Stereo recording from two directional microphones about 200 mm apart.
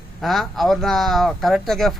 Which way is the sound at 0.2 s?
Centre (ahead or behind).